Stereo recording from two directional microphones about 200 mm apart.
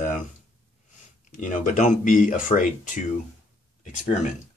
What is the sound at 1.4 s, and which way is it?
Speech, 40° left (ahead or behind).